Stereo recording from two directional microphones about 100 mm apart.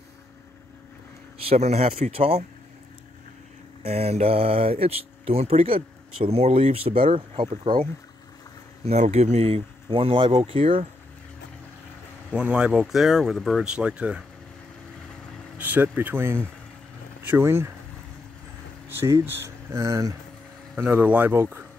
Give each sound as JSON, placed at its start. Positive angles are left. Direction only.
{"t": 1.5, "sound": "speech", "side_deg": -85}
{"t": 3.8, "sound": "speech", "side_deg": -90}
{"t": 8.8, "sound": "speech", "side_deg": -90}
{"t": 10.4, "sound": "speech", "side_deg": -70}
{"t": 12.3, "sound": "speech", "side_deg": -10}
{"t": 15.5, "sound": "speech", "side_deg": -15}
{"t": 18.9, "sound": "speech", "side_deg": -25}
{"t": 20.7, "sound": "speech", "side_deg": -20}